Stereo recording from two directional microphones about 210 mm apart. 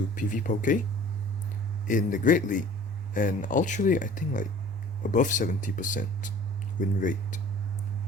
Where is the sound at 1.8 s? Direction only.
40° left (ahead or behind).